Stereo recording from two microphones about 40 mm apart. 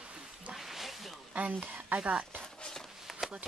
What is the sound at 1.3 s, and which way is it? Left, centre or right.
Speech, right.